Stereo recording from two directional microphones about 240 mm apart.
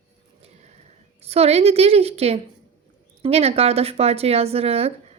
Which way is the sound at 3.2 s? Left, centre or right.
Right.